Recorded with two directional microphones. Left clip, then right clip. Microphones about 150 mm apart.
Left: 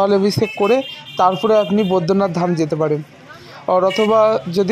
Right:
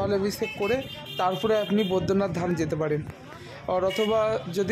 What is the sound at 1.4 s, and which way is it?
A man's voice, 35° left (ahead or behind).